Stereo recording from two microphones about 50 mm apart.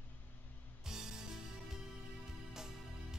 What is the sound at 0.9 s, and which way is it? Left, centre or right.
Music, centre.